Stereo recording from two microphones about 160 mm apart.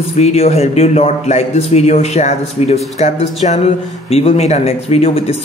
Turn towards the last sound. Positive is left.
turn(degrees=40)  # may be behind; listen again after turning